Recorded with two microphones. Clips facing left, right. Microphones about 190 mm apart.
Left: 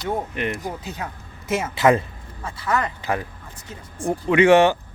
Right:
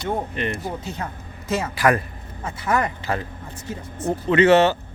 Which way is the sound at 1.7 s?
20° left (ahead or behind).